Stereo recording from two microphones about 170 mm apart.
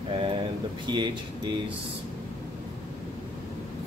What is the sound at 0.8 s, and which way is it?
Speech, 25° right (ahead or behind).